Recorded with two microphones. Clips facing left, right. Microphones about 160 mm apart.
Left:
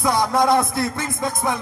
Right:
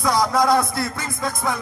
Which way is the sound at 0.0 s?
25° left (ahead or behind).